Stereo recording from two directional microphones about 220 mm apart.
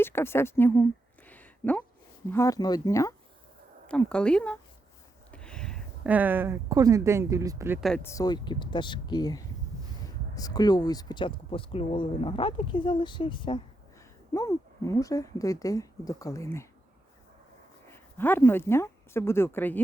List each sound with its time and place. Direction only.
0.0 s speech: 10° left (ahead or behind)
1.3 s a sound: 5° left (ahead or behind)
2.3 s a woman's voice: 15° left (ahead or behind); by 7.8 s 15° right (ahead or behind)
7.8 s a woman's voice: centre (ahead or behind)
8.0 s speech: 15° left (ahead or behind)
18.2 s speech: 10° left (ahead or behind)